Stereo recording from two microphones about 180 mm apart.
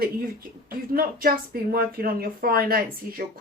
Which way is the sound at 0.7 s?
55° right (ahead or behind).